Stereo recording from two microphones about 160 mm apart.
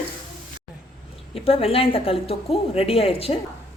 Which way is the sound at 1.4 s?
35° left (ahead or behind).